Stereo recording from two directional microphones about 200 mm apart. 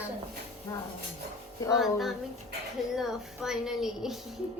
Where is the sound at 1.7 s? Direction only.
Centre (ahead or behind).